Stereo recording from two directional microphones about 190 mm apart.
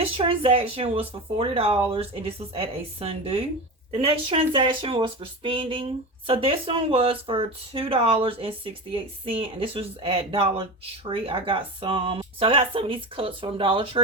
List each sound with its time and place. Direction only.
0.0 s speech: 30° right (ahead or behind)